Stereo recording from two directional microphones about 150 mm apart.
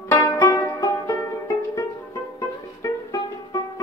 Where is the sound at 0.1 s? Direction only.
20° left (ahead or behind).